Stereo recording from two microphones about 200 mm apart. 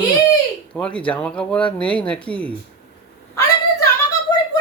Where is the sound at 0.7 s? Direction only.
5° left (ahead or behind).